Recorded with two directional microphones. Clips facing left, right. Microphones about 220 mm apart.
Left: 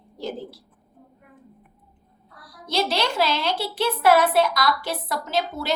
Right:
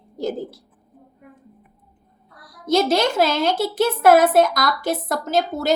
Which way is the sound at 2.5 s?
45° right (ahead or behind).